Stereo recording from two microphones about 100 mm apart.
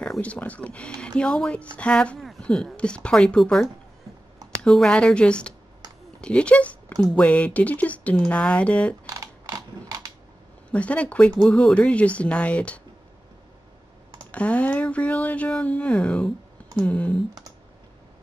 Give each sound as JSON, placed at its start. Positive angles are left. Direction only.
{"t": 0.0, "sound": "speech", "side_deg": 10}
{"t": 9.1, "sound": "mechanisms", "side_deg": -40}
{"t": 10.7, "sound": "speech", "side_deg": 15}
{"t": 14.3, "sound": "speech", "side_deg": 15}